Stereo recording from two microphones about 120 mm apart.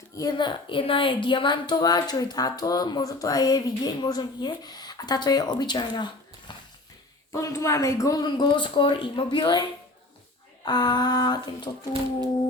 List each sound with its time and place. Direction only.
0.2 s speech: 35° left (ahead or behind)
6.5 s bouncing: 40° left (ahead or behind)
7.3 s speech: 25° left (ahead or behind)
10.7 s speech: 35° left (ahead or behind)